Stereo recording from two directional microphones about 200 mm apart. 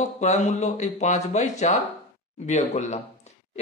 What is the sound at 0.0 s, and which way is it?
Speech, 35° left (ahead or behind).